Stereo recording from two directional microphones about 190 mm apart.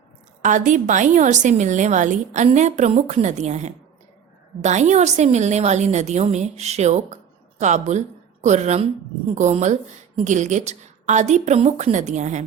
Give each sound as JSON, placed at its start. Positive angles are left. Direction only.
{"t": 0.4, "sound": "a woman's voice", "side_deg": -40}